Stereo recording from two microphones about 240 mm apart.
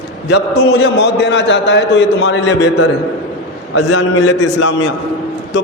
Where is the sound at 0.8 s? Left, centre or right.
Left.